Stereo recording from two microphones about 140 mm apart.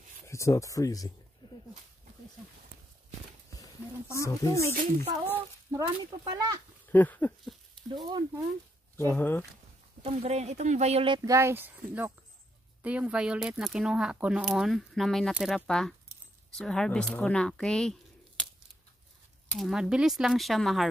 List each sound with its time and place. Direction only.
0.3 s speech: 20° left (ahead or behind)
1.4 s dog: 30° left (ahead or behind)
4.2 s speech: 20° left (ahead or behind)
5.7 s speech: 25° right (ahead or behind)
6.9 s a sound: 10° left (ahead or behind)
7.9 s speech: 30° right (ahead or behind)
8.9 s speech: 15° left (ahead or behind)
10.0 s speech: 45° right (ahead or behind)
11.1 s speech: 20° right (ahead or behind); by 18.4 s 5° left (ahead or behind)
19.5 s speech: centre (ahead or behind)